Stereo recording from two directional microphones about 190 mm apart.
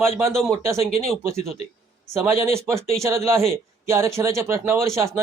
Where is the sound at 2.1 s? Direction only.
15° right (ahead or behind).